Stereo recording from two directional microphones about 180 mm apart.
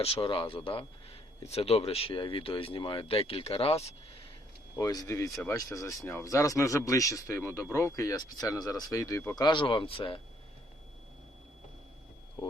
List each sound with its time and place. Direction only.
0.0 s speech: 30° left (ahead or behind)
4.8 s speech: 20° left (ahead or behind)